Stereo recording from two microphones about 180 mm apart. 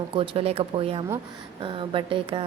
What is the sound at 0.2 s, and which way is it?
Speech, 35° right (ahead or behind).